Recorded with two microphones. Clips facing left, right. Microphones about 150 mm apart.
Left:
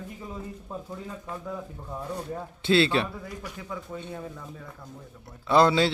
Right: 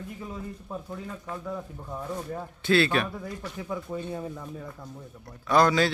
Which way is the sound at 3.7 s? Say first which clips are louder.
Right 5 dB; 15° right (ahead or behind).